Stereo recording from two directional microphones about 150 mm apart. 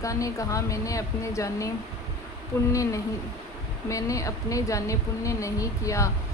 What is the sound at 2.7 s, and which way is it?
A woman's voice, 20° left (ahead or behind).